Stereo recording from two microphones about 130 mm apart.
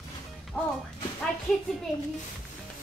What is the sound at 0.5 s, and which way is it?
Music, 15° left (ahead or behind).